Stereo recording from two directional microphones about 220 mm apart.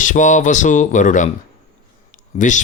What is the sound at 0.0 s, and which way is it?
Speech, 35° left (ahead or behind).